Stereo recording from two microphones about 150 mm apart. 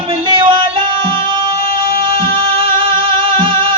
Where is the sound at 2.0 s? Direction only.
35° right (ahead or behind).